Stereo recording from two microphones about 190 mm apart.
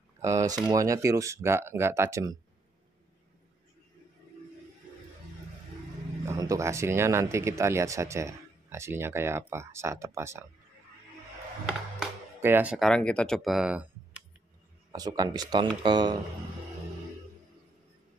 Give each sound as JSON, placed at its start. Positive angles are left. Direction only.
{"t": 0.2, "sound": "speech", "side_deg": -15}
{"t": 6.2, "sound": "speech", "side_deg": -15}
{"t": 11.6, "sound": "music", "side_deg": -10}
{"t": 12.7, "sound": "speech", "side_deg": 5}
{"t": 14.9, "sound": "speech", "side_deg": -20}